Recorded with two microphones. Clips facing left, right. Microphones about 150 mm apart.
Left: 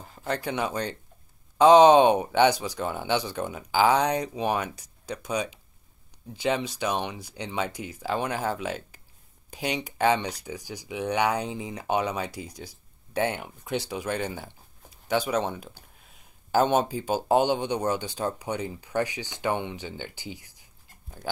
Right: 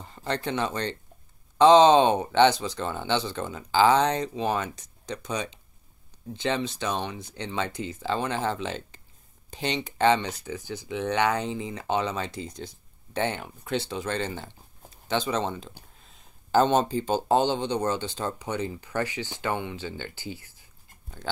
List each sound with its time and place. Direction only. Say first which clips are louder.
0.0 s speech: even; 5° left (ahead or behind)